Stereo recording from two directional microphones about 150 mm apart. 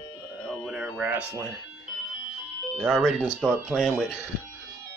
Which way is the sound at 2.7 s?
5° right (ahead or behind).